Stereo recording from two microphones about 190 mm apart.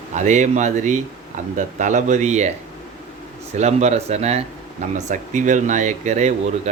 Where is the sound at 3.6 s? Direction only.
35° right (ahead or behind).